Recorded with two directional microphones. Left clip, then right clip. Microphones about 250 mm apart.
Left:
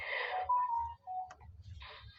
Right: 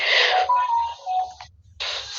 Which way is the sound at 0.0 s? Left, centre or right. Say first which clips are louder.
Right 19 dB; right.